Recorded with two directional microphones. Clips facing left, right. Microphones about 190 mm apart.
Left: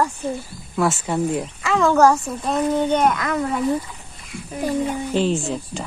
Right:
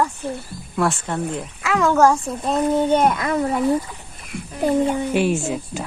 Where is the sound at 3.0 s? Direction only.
30° right (ahead or behind).